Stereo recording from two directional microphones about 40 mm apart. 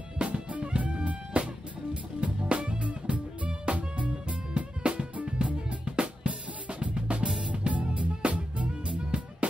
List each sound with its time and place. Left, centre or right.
0.2 s music: right